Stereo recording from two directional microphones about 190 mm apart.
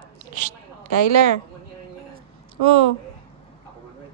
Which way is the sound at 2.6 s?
30° right (ahead or behind).